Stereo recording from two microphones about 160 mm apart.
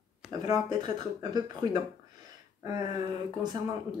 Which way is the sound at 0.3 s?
25° right (ahead or behind).